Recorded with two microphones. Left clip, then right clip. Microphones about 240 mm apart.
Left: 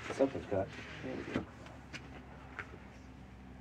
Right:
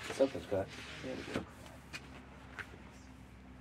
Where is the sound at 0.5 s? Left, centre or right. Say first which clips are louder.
Left 1 dB; right.